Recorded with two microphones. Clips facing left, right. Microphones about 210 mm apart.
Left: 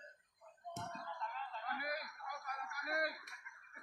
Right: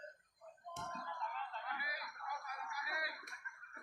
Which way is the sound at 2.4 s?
50° left (ahead or behind).